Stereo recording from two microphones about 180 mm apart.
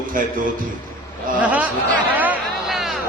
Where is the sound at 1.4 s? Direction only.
10° right (ahead or behind).